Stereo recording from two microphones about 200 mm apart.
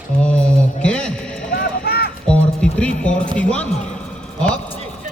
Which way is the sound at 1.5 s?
50° left (ahead or behind).